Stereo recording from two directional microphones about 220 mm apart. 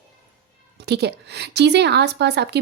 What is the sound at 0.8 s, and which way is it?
Speech, 50° right (ahead or behind).